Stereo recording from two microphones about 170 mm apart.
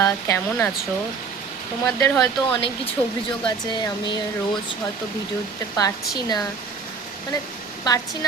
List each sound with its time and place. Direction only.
0.0 s speech: 15° left (ahead or behind)
1.8 s speech: 5° left (ahead or behind)
3.4 s speech: 25° left (ahead or behind)
5.7 s speech: 20° left (ahead or behind)
7.9 s speech: 20° left (ahead or behind)